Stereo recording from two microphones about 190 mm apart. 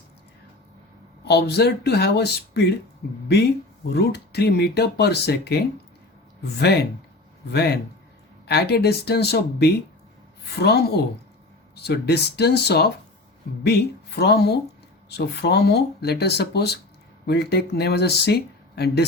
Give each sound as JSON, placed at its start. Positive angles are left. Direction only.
{"t": 1.2, "sound": "speech", "side_deg": 60}
{"t": 3.8, "sound": "speech", "side_deg": 60}
{"t": 7.5, "sound": "speech", "side_deg": 55}